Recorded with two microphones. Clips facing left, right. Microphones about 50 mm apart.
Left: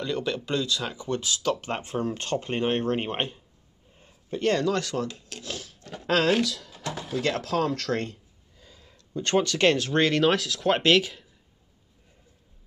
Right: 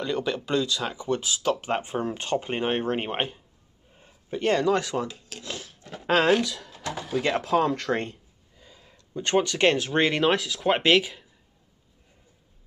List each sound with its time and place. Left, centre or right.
0.0 s speech: centre
5.0 s speech: centre
5.4 s a sound: right
6.0 s speech: centre
7.2 s speech: centre
8.1 s a sound: centre
8.9 s speech: centre